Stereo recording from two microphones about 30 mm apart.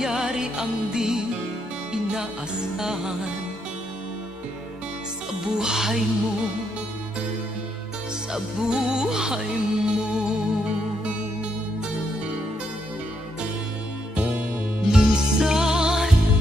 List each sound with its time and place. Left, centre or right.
0.0 s music: right
2.8 s music: centre
5.4 s speech: right
8.3 s music: right
14.9 s music: right